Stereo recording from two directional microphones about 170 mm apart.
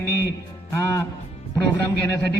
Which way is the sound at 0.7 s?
15° left (ahead or behind).